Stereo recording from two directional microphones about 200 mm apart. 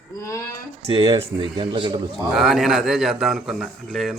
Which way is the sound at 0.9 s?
25° right (ahead or behind).